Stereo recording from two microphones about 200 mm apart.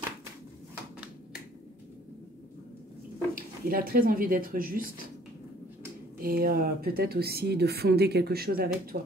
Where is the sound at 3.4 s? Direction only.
45° right (ahead or behind).